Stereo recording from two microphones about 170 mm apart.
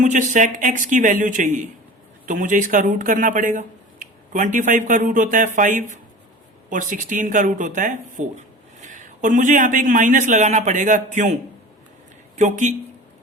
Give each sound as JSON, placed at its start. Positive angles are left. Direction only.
{"t": 0.0, "sound": "speech", "side_deg": -45}
{"t": 12.4, "sound": "speech", "side_deg": -45}